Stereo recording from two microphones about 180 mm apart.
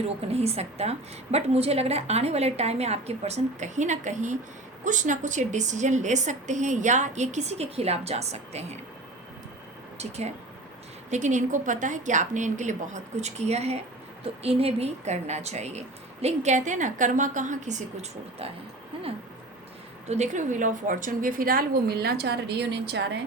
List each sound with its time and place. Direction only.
0.0 s a woman's voice: 35° right (ahead or behind)
10.0 s a woman's voice: 40° right (ahead or behind)
20.1 s a woman's voice: 40° right (ahead or behind); by 23.1 s 70° right (ahead or behind)